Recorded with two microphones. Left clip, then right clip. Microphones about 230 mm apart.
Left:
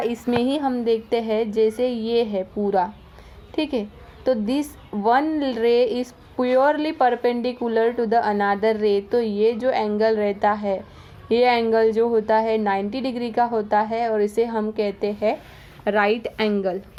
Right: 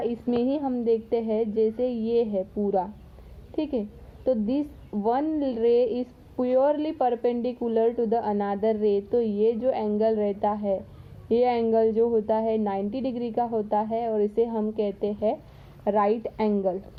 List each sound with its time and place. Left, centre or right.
0.0 s a woman's voice: centre
3.5 s a woman's voice: centre